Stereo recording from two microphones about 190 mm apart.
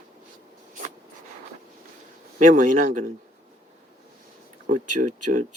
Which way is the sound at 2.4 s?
40° right (ahead or behind).